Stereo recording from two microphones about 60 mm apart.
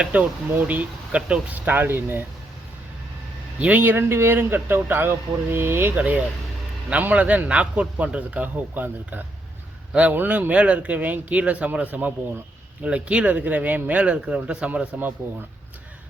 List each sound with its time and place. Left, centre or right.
0.1 s a man's voice: right
3.6 s speech: right
5.9 s a man's voice: right
15.2 s speech: right